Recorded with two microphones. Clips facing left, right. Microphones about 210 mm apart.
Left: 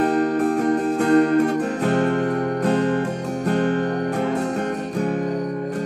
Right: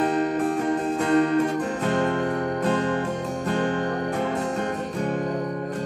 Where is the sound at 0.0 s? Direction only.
40° left (ahead or behind).